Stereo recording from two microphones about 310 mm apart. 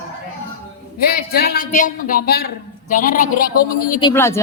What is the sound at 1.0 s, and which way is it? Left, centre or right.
A man's voice, left.